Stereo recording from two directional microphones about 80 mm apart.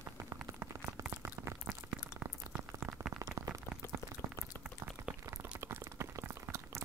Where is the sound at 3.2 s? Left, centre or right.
Right.